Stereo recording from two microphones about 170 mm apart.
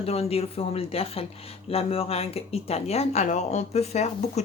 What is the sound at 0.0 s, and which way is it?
Speech, 35° left (ahead or behind).